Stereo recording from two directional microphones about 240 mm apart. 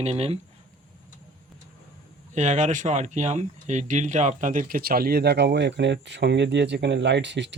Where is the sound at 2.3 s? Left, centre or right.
Right.